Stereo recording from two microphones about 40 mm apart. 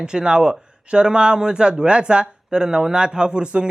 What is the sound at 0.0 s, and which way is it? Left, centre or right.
Speech, right.